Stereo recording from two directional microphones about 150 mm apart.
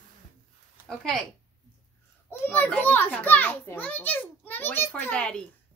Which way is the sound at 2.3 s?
10° left (ahead or behind).